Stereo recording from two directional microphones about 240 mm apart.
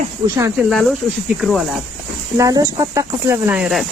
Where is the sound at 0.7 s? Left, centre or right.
Centre.